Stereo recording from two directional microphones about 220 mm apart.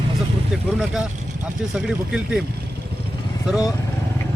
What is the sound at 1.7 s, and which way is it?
Speech, 5° right (ahead or behind).